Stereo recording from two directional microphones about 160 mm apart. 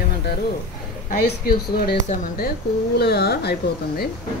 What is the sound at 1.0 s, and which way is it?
Speech, 75° left (ahead or behind).